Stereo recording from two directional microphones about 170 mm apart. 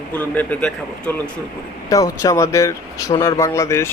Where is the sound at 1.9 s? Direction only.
20° left (ahead or behind).